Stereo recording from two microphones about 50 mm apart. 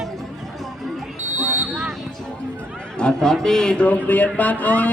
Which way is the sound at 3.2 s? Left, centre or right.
Centre.